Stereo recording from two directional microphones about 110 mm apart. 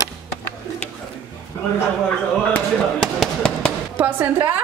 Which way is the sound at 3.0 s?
5° left (ahead or behind).